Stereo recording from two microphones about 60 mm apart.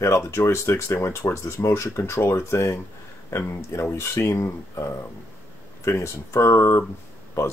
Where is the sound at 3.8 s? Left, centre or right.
Left.